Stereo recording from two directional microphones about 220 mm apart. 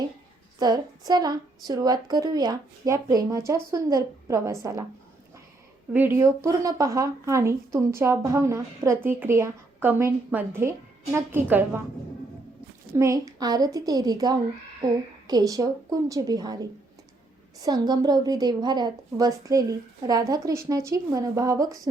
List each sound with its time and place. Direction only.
0.6 s speech: 20° right (ahead or behind)
5.9 s speech: 10° right (ahead or behind)
12.9 s speech: 15° right (ahead or behind)